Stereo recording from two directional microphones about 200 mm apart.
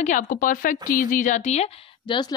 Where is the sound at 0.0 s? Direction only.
40° left (ahead or behind).